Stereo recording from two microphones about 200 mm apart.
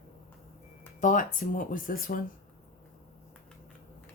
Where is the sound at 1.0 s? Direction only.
40° left (ahead or behind).